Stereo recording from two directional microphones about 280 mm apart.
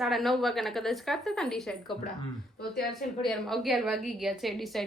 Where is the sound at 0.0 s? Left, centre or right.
Centre.